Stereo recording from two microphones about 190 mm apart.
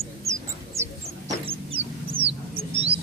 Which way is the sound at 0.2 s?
15° right (ahead or behind).